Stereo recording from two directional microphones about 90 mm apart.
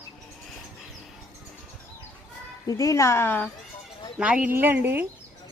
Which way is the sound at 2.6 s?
40° left (ahead or behind).